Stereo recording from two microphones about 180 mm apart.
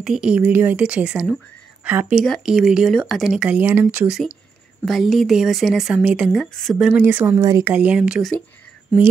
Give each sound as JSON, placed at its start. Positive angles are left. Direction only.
{"t": 0.0, "sound": "speech", "side_deg": -5}
{"t": 6.9, "sound": "speech", "side_deg": -10}
{"t": 7.7, "sound": "speech", "side_deg": -5}